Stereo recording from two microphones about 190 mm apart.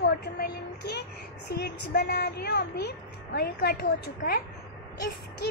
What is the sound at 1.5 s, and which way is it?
A child's voice, 55° left (ahead or behind).